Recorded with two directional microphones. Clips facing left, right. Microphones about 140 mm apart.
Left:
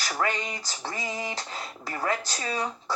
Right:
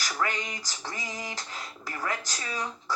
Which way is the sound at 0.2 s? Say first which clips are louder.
Left 3 dB; 25° left (ahead or behind).